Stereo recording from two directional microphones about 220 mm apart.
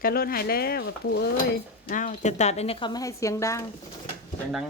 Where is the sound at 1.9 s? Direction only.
35° left (ahead or behind); by 3.6 s 15° left (ahead or behind).